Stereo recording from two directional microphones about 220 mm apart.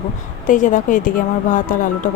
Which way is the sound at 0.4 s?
35° left (ahead or behind).